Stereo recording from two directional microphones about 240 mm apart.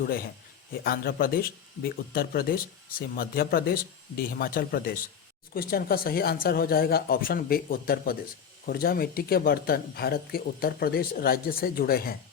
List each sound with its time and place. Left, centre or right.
0.9 s speech: left